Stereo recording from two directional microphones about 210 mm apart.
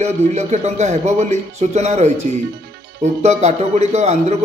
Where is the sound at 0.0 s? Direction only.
35° right (ahead or behind).